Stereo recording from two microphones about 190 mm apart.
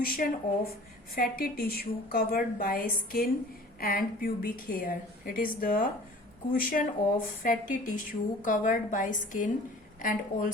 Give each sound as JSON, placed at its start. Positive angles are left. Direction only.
{"t": 0.0, "sound": "a woman's voice", "side_deg": 50}